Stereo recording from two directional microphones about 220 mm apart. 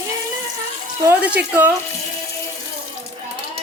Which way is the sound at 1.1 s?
5° right (ahead or behind).